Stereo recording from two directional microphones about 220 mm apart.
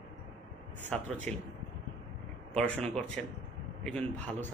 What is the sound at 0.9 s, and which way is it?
Speech, 5° left (ahead or behind).